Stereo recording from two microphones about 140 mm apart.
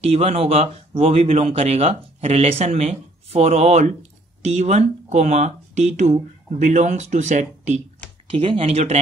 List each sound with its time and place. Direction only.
0.0 s speech: 45° right (ahead or behind)
8.4 s speech: 40° right (ahead or behind)